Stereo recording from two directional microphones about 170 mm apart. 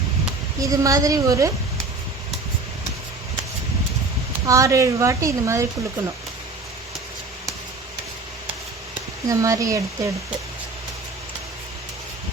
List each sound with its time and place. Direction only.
0.6 s a woman's voice: 20° right (ahead or behind)
4.4 s a woman's voice: 20° right (ahead or behind)
9.2 s a woman's voice: 20° right (ahead or behind)